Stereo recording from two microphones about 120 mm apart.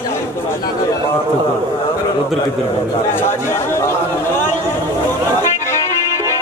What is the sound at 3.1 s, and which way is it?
Speech, 20° left (ahead or behind).